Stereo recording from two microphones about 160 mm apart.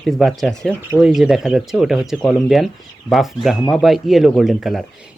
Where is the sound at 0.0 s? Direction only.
Centre (ahead or behind).